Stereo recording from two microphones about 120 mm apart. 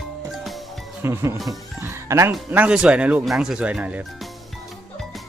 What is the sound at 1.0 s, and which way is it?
Speech, 20° right (ahead or behind).